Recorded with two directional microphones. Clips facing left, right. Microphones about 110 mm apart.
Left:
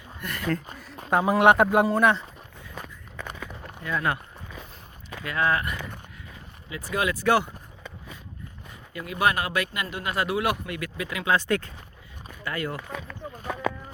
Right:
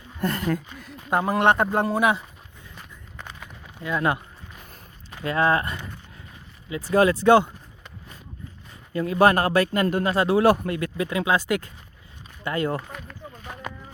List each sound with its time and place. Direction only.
0.2 s speech: 30° right (ahead or behind)
1.1 s speech: 5° left (ahead or behind)
1.9 s speech: 5° right (ahead or behind)
3.8 s speech: 15° right (ahead or behind)
5.2 s speech: 30° right (ahead or behind)
8.9 s speech: 35° right (ahead or behind)
11.3 s speech: 15° right (ahead or behind)
12.4 s speech: 25° right (ahead or behind)